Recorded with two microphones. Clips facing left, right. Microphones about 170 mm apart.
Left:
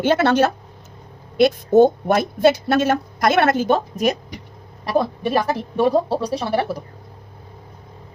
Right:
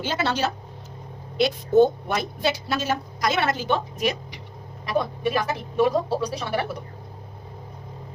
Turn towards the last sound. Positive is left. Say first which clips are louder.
# left 6 dB
turn(degrees=35)  # may be behind; listen again after turning